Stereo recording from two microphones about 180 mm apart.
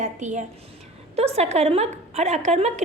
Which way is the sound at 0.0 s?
40° right (ahead or behind).